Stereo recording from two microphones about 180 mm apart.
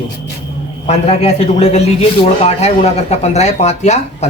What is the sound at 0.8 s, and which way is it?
A man's voice, 35° left (ahead or behind).